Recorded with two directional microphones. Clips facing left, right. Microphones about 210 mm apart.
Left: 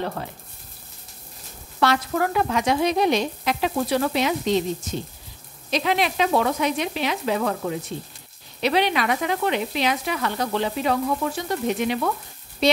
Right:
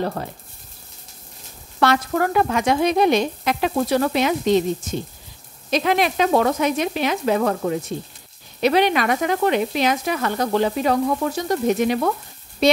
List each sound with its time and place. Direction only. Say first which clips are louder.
1.8 s speech: right 3 dB; 50° right (ahead or behind)
5.7 s speech: right 3 dB; 50° right (ahead or behind)